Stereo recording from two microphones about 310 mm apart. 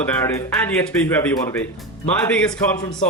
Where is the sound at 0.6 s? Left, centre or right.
Centre.